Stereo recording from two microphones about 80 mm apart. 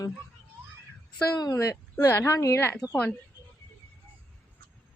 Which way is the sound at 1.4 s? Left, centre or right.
Left.